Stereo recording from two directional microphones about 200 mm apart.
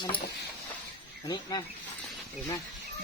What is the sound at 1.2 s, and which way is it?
Speech, 20° left (ahead or behind).